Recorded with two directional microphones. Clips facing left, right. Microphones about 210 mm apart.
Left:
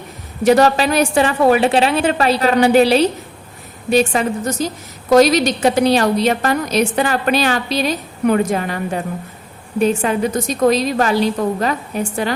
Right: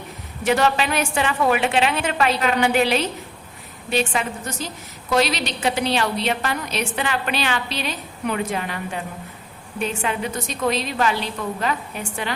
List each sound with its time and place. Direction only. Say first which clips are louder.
0.4 s a woman's voice: left 7 dB; 40° left (ahead or behind)